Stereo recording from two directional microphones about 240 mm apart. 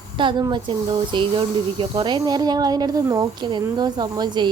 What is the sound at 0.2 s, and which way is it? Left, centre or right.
Speech, centre.